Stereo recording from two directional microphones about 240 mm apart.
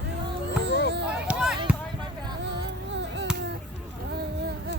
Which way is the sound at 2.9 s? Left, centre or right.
Right.